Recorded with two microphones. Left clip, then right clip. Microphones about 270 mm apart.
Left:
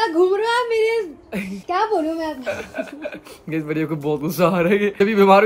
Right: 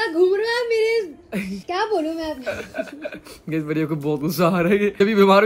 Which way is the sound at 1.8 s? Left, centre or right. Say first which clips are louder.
Left 1 dB; centre.